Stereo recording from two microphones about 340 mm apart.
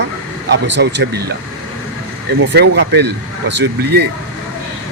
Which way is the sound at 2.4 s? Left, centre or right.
Right.